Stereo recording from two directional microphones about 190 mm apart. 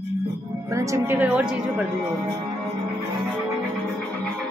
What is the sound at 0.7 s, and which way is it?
A woman's voice, 15° right (ahead or behind).